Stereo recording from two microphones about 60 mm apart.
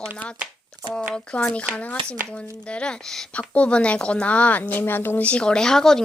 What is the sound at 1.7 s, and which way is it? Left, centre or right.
A woman's voice, left.